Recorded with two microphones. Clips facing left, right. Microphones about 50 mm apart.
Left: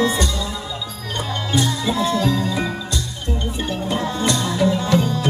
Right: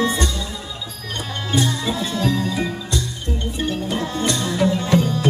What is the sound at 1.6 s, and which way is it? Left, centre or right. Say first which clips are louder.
Music: left 2 dB; centre.